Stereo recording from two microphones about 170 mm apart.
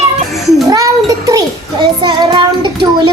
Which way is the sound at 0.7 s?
20° right (ahead or behind).